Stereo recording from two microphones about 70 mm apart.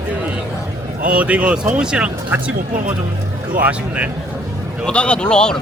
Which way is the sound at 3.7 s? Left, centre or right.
Centre.